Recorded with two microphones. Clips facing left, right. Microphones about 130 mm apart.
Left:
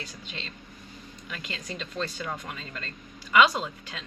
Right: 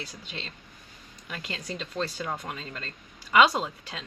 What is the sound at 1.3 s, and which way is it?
A woman's voice, 35° right (ahead or behind).